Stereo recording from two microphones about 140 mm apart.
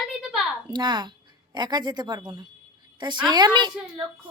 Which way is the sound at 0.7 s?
30° right (ahead or behind).